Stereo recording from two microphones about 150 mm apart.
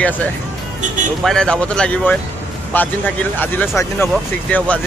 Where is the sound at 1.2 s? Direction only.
5° left (ahead or behind).